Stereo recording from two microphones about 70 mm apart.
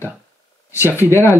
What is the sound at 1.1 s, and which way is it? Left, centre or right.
Speech, left.